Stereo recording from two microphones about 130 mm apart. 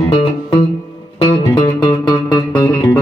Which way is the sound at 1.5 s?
25° left (ahead or behind).